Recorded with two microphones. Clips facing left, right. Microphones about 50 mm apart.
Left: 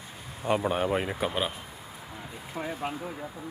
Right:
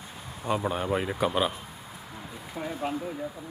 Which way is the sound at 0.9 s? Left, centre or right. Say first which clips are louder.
Right 2 dB; centre.